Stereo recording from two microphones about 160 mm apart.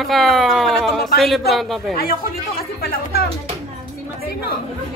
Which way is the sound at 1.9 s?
70° left (ahead or behind).